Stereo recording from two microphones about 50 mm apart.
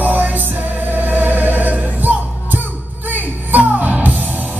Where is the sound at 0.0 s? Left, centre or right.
Right.